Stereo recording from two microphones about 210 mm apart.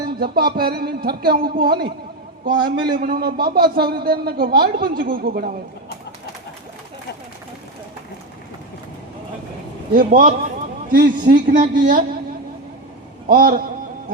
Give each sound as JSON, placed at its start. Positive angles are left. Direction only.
{"t": 0.2, "sound": "a man's voice", "side_deg": -45}
{"t": 9.9, "sound": "a man's voice", "side_deg": -40}
{"t": 13.2, "sound": "a man's voice", "side_deg": -45}